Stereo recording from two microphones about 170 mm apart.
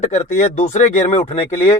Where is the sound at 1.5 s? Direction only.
15° left (ahead or behind).